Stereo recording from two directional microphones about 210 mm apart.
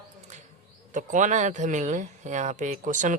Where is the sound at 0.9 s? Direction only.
35° right (ahead or behind).